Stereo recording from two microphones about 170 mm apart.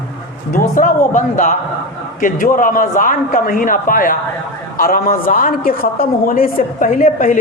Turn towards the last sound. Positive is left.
turn(degrees=55)  # may be behind; listen again after turning